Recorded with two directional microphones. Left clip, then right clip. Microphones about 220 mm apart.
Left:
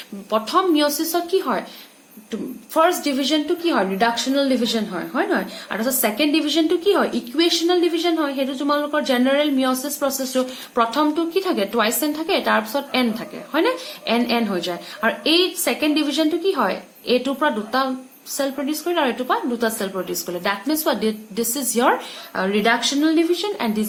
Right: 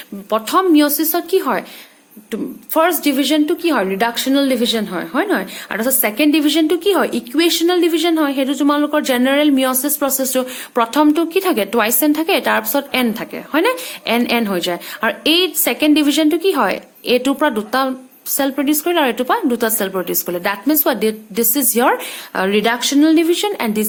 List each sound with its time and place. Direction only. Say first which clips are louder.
0.3 s a woman's voice: right 4 dB; 45° right (ahead or behind)